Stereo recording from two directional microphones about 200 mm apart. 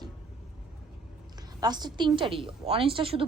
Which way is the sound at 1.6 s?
20° right (ahead or behind).